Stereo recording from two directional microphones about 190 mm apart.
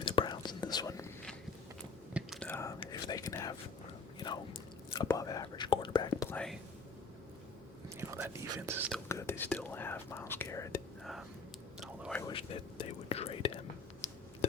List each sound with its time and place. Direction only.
0.0 s whispering: 25° left (ahead or behind)
2.1 s whispering: centre (ahead or behind)
2.5 s whispering: 15° left (ahead or behind)
4.9 s speech: 20° left (ahead or behind)
6.3 s speech: 5° left (ahead or behind)
7.9 s speech: 15° right (ahead or behind)
9.0 s speech: 15° left (ahead or behind)
11.0 s whispering: centre (ahead or behind)
12.3 s whispering: 30° left (ahead or behind)
14.0 s a sound: 35° left (ahead or behind)